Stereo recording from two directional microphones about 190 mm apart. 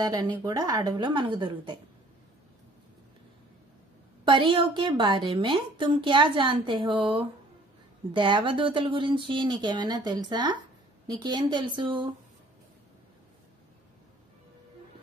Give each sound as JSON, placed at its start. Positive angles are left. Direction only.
{"t": 0.0, "sound": "a woman's voice", "side_deg": -20}
{"t": 4.2, "sound": "a woman's voice", "side_deg": -25}